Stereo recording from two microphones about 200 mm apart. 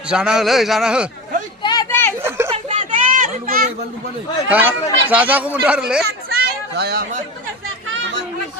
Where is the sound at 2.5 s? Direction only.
35° right (ahead or behind).